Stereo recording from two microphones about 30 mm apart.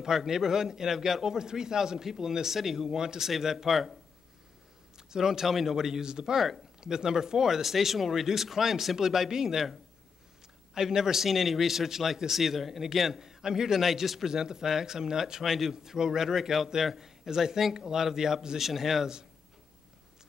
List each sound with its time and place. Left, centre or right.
0.0 s speech: centre
0.5 s speech: centre
4.9 s speech: centre
6.3 s speech: centre
6.8 s speech: right
10.7 s speech: centre
13.2 s speech: centre
14.2 s speech: centre
15.4 s speech: centre
15.7 s speech: centre
16.3 s a man's voice: centre